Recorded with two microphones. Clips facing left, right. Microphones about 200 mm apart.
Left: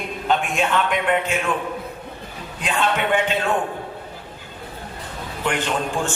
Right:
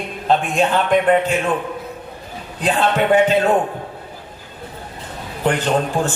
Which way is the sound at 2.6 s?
35° right (ahead or behind).